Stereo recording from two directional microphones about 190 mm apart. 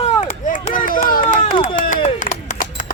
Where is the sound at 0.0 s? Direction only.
40° left (ahead or behind).